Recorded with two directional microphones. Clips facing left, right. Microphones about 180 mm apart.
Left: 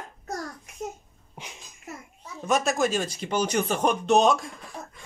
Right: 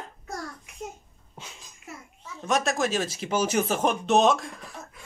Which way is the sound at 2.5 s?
Centre (ahead or behind).